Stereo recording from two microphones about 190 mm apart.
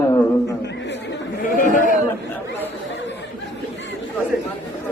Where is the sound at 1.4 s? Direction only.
45° left (ahead or behind).